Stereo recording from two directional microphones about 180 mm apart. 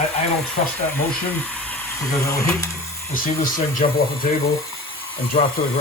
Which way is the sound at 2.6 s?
15° left (ahead or behind).